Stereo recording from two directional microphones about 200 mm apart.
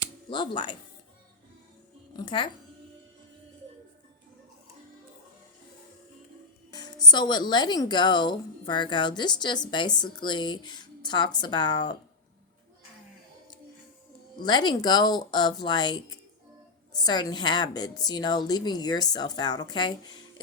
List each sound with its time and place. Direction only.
0.3 s speech: 25° left (ahead or behind)
2.1 s speech: 25° left (ahead or behind)
6.7 s speech: 20° left (ahead or behind)
14.4 s speech: 20° left (ahead or behind)